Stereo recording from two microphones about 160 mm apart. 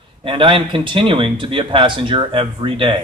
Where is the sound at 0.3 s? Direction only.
30° right (ahead or behind).